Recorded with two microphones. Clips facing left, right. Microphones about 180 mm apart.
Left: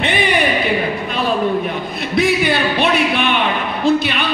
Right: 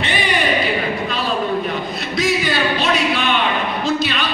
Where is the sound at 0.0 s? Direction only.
60° left (ahead or behind).